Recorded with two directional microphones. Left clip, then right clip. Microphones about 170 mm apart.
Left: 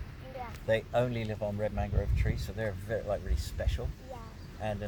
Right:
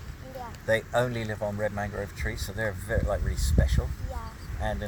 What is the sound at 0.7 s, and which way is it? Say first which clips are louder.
Speech: right 4 dB; 5° right (ahead or behind).